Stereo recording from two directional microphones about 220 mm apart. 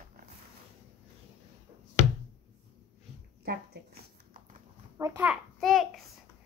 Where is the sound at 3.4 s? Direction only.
45° right (ahead or behind).